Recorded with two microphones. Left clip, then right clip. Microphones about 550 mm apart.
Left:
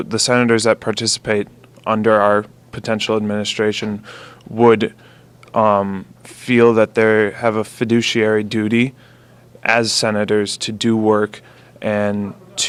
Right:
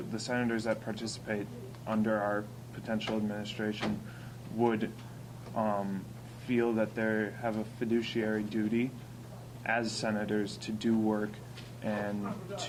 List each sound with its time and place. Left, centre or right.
0.2 s speech: left